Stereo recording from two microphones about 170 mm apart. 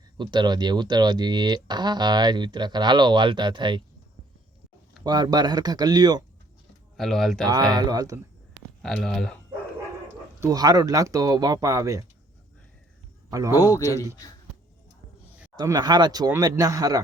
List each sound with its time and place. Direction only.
0.2 s speech: 25° right (ahead or behind)
5.0 s speech: 25° right (ahead or behind)
6.9 s speech: centre (ahead or behind)
7.4 s speech: 20° right (ahead or behind)
8.8 s speech: 5° left (ahead or behind)
10.4 s speech: 20° right (ahead or behind)
13.5 s a man's voice: 20° left (ahead or behind)
15.5 s speech: 25° right (ahead or behind)